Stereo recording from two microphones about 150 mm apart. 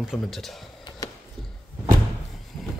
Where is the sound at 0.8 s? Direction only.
30° left (ahead or behind).